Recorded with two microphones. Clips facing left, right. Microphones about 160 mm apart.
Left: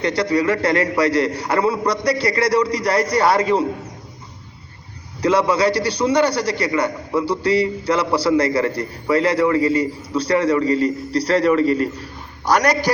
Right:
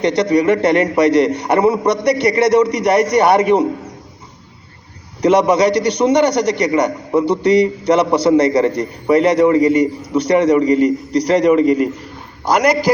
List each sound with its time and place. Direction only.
0.0 s a man's voice: 20° right (ahead or behind)
5.2 s a man's voice: 20° right (ahead or behind)